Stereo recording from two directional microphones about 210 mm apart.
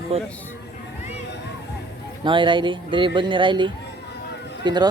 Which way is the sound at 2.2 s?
25° right (ahead or behind).